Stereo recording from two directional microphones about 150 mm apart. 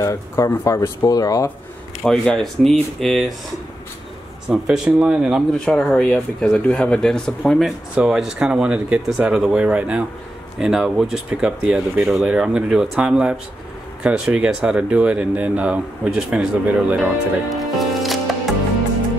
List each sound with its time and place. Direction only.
0.0 s speech: 20° left (ahead or behind)
2.0 s speech: 5° left (ahead or behind)
4.5 s speech: 5° right (ahead or behind)
5.7 s speech: 5° left (ahead or behind)